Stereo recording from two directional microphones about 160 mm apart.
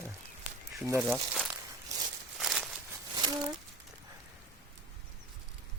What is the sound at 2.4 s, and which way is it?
Walk, centre (ahead or behind).